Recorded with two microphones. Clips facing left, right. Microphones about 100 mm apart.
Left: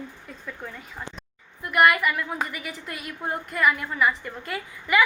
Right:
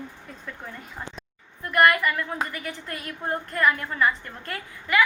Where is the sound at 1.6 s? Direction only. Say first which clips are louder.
Even; 15° left (ahead or behind).